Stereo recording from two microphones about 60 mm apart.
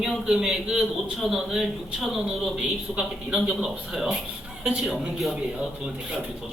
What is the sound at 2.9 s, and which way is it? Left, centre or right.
Speech, right.